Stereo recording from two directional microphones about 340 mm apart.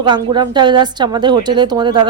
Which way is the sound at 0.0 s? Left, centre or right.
Centre.